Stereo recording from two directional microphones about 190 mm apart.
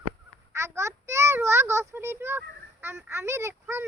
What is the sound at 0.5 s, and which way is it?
A child's voice, 15° right (ahead or behind).